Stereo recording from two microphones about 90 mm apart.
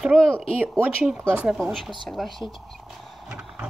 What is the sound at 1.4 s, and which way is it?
Speech, 5° right (ahead or behind).